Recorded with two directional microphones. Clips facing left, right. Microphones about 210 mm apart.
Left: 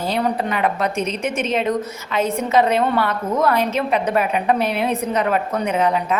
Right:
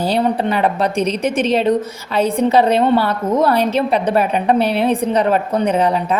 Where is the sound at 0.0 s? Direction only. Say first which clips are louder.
Right 4 dB; 30° right (ahead or behind).